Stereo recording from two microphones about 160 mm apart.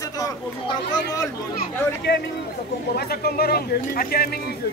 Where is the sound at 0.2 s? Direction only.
20° left (ahead or behind).